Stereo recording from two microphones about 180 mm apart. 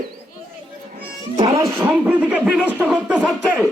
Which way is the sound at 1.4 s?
30° right (ahead or behind).